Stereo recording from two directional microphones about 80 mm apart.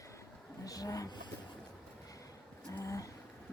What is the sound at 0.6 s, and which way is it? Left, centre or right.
Speech, left.